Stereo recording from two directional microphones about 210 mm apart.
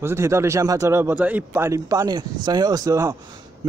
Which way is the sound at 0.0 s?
10° right (ahead or behind).